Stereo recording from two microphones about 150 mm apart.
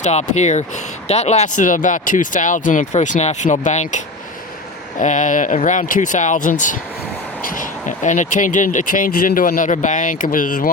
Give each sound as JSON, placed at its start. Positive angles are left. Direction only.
{"t": 0.0, "sound": "speech", "side_deg": 50}